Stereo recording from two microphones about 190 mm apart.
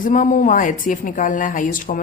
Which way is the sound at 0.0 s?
45° left (ahead or behind).